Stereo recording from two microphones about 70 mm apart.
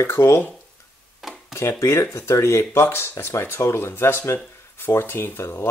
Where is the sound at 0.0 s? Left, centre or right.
Left.